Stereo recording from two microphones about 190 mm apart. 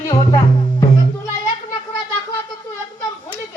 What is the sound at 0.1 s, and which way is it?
Music, 20° left (ahead or behind).